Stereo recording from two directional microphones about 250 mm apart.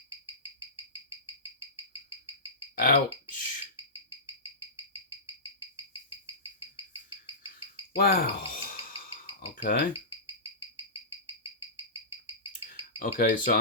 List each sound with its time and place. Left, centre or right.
2.7 s a sound: left
7.9 s speech: left
13.0 s speech: left